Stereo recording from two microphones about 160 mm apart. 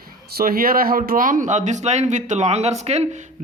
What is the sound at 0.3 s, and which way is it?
Speech, 75° right (ahead or behind).